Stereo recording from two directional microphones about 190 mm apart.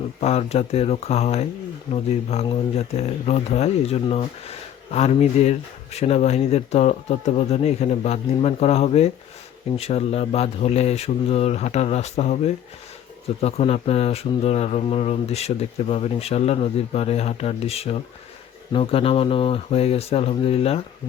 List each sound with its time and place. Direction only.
0.2 s speech: 35° left (ahead or behind)
13.4 s speech: 35° left (ahead or behind)